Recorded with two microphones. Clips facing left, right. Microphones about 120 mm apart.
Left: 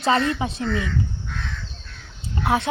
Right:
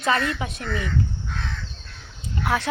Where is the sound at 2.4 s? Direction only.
25° left (ahead or behind).